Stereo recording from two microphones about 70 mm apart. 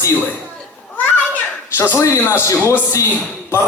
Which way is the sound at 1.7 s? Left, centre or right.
Left.